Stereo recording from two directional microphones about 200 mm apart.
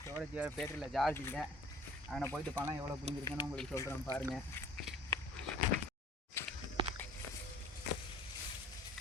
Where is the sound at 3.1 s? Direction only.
30° right (ahead or behind).